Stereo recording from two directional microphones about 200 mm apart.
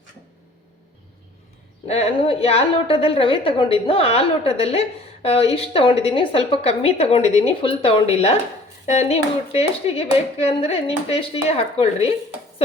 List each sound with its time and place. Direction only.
1.9 s a woman's voice: 30° left (ahead or behind)